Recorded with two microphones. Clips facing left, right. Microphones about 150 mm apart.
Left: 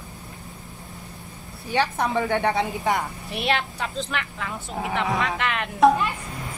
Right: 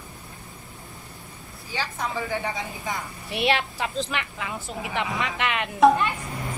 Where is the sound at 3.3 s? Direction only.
Centre (ahead or behind).